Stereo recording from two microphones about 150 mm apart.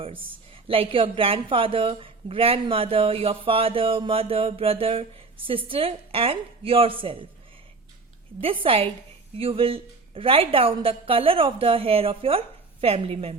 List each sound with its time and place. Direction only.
0.5 s speech: 35° right (ahead or behind)
8.6 s speech: 40° right (ahead or behind)